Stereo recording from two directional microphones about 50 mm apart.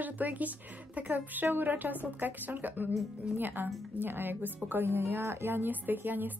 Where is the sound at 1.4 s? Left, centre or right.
Right.